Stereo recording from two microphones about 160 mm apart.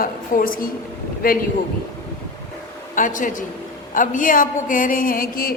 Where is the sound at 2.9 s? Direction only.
55° left (ahead or behind).